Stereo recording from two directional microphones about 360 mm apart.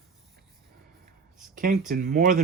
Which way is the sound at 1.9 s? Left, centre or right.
Right.